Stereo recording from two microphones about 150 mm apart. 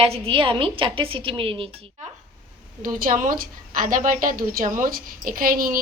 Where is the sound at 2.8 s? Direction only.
65° right (ahead or behind).